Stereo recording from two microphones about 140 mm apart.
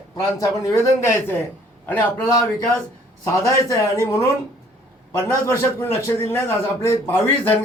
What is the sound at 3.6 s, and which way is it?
Speech, 20° left (ahead or behind).